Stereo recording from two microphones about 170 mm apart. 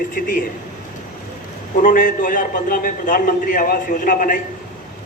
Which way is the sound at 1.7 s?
55° left (ahead or behind).